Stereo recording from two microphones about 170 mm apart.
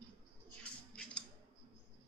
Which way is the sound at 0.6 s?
5° left (ahead or behind).